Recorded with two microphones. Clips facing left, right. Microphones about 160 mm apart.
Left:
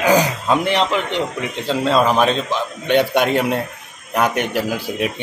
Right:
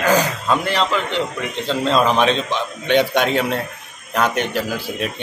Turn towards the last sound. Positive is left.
turn(degrees=10)  # may be behind; listen again after turning